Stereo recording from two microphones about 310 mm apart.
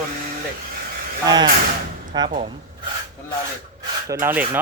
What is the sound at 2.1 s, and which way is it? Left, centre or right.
Speech, centre.